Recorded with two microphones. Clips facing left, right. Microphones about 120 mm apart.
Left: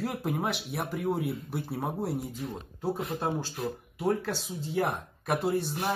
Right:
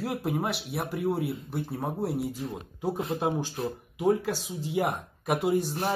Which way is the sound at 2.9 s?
25° right (ahead or behind).